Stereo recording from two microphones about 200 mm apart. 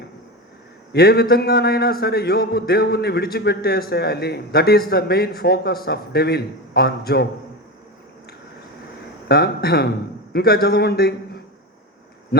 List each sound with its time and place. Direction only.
0.9 s a man's voice: 50° left (ahead or behind)
9.3 s a man's voice: 50° left (ahead or behind)